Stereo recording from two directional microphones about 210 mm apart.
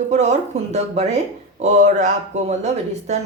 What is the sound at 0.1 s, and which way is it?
Speech, 35° right (ahead or behind).